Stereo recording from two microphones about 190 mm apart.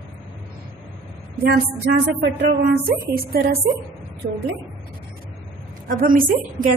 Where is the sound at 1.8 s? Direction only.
60° right (ahead or behind).